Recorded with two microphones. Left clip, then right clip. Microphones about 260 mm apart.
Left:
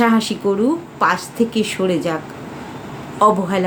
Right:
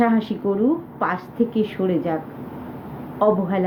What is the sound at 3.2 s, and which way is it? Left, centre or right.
Speech, centre.